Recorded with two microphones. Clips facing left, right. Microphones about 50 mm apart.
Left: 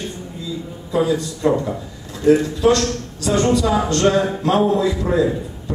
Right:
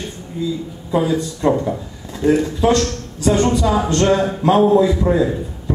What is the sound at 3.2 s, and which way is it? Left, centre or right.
Speech, right.